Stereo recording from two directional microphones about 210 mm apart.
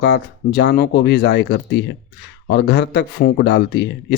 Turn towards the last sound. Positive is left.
turn(degrees=55)  # may be behind; listen again after turning